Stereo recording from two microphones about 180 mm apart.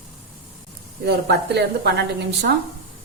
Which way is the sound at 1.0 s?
65° right (ahead or behind).